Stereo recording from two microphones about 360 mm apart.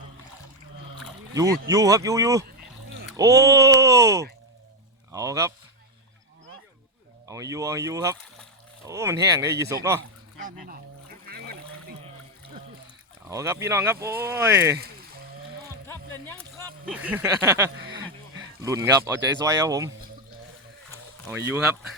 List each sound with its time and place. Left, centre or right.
1.3 s speech: centre
7.3 s speech: centre
10.4 s speech: right
11.3 s a sound: right
13.2 s speech: centre
15.9 s speech: centre
21.2 s speech: centre